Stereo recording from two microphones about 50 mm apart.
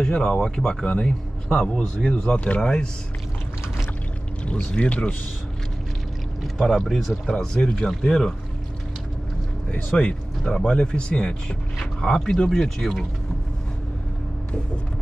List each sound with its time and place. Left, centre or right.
0.0 s a man's voice: centre
4.5 s speech: left
6.4 s speech: centre
7.2 s speech: centre
9.9 s speech: centre